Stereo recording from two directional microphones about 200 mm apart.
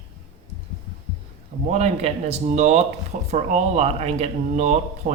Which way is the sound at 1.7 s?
35° right (ahead or behind).